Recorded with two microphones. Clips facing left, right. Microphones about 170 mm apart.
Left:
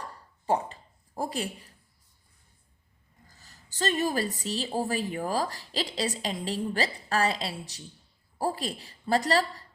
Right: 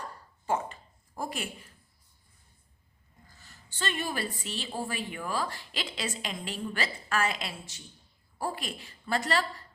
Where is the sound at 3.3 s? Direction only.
40° left (ahead or behind).